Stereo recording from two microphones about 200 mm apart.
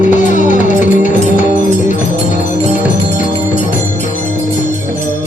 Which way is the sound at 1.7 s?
40° left (ahead or behind).